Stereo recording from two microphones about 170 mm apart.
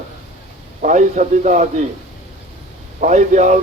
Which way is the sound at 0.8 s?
45° right (ahead or behind).